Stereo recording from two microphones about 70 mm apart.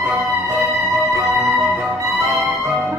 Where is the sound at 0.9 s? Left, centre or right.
Right.